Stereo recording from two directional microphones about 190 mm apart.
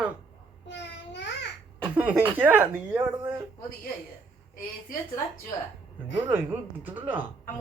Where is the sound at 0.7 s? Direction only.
65° left (ahead or behind).